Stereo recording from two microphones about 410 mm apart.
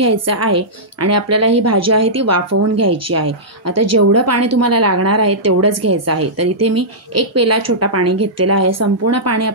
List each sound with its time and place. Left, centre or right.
0.0 s a woman's voice: right